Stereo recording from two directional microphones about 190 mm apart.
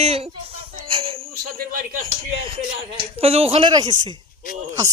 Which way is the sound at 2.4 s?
30° right (ahead or behind).